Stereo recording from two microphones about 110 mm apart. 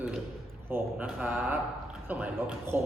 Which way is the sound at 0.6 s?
20° right (ahead or behind).